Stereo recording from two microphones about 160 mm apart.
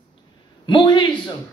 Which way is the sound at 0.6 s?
30° left (ahead or behind).